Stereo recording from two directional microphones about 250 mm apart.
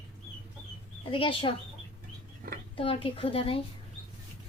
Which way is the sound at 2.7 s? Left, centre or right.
Left.